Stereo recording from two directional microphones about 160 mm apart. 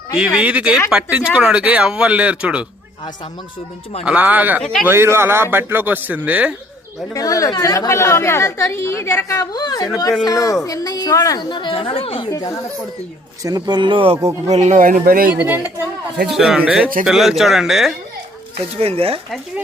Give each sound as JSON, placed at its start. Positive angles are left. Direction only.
{"t": 0.3, "sound": "speech", "side_deg": -5}
{"t": 4.0, "sound": "speech", "side_deg": -10}
{"t": 7.1, "sound": "a woman's voice", "side_deg": 20}
{"t": 12.3, "sound": "a woman's voice", "side_deg": 20}
{"t": 13.4, "sound": "speech", "side_deg": -25}
{"t": 14.4, "sound": "speech", "side_deg": -45}
{"t": 15.4, "sound": "speech", "side_deg": -10}
{"t": 18.5, "sound": "speech", "side_deg": -40}